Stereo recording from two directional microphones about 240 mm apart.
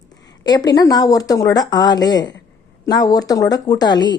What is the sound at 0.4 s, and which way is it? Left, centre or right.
Speech, centre.